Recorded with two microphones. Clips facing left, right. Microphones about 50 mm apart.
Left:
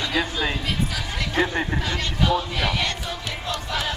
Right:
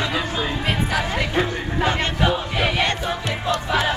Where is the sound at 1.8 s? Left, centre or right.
Right.